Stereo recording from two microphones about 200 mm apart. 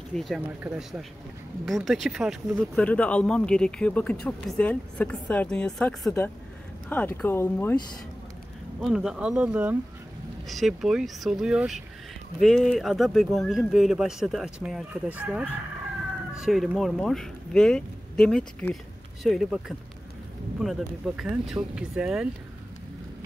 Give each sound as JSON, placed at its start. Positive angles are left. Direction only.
{"t": 0.1, "sound": "speech", "side_deg": 0}
{"t": 8.8, "sound": "speech", "side_deg": 0}
{"t": 20.6, "sound": "speech", "side_deg": 0}